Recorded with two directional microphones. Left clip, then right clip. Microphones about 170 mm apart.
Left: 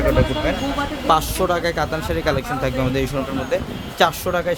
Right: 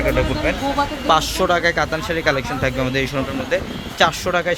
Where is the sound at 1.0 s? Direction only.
5° right (ahead or behind).